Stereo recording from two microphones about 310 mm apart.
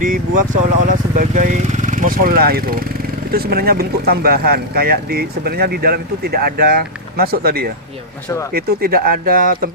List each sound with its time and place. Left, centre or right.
0.0 s speech: right